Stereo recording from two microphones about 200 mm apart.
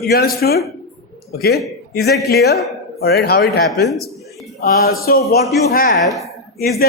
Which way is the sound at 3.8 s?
Centre (ahead or behind).